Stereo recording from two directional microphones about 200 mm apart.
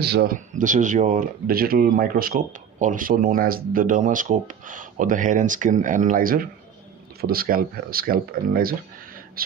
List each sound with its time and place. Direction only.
0.0 s speech: 50° right (ahead or behind)